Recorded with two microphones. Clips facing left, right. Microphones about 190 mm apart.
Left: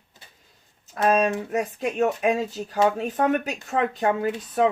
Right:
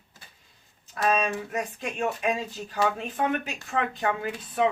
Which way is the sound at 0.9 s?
45° left (ahead or behind).